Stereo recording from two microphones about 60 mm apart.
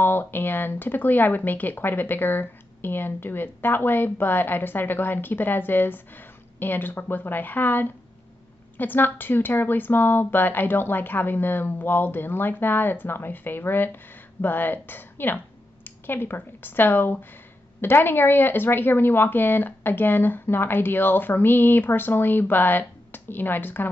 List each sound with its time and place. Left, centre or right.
0.0 s a woman's voice: left